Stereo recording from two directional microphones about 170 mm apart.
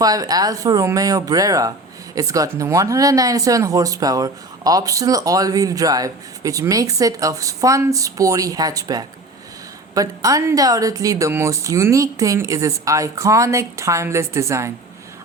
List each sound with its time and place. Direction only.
0.0 s speech: 20° right (ahead or behind)